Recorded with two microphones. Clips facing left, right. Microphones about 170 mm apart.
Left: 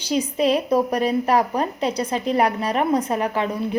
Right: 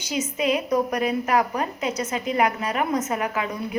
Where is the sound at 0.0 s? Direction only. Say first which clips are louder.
Left 5 dB; 35° left (ahead or behind).